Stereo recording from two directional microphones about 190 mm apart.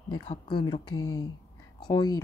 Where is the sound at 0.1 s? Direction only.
25° left (ahead or behind).